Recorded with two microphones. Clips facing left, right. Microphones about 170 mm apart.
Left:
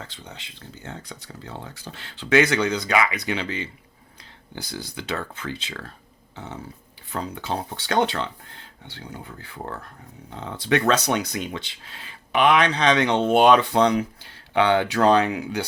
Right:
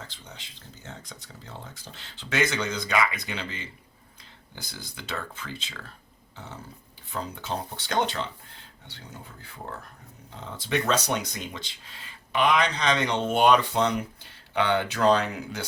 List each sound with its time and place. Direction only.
0.1 s speech: 65° left (ahead or behind)
7.1 s speech: 70° left (ahead or behind)